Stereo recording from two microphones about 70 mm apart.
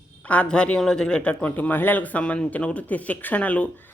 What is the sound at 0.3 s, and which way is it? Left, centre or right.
A woman's voice, centre.